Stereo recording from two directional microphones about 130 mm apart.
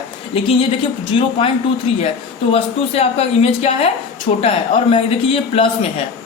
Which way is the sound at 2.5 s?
50° left (ahead or behind).